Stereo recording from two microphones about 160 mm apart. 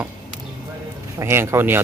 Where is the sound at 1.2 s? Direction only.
15° right (ahead or behind).